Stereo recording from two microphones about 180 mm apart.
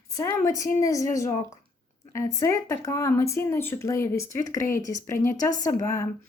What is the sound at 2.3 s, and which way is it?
Speech, 15° left (ahead or behind).